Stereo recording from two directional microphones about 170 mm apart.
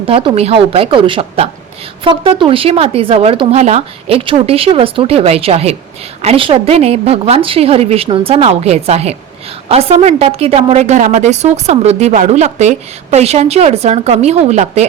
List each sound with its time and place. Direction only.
0.1 s a woman's voice: 30° right (ahead or behind)